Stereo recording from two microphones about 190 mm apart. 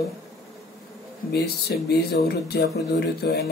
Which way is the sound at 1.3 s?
60° left (ahead or behind).